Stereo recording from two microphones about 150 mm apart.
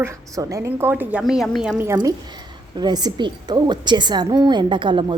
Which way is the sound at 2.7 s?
30° right (ahead or behind).